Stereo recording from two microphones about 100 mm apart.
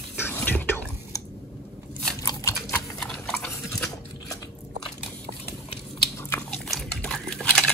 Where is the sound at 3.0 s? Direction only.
5° left (ahead or behind).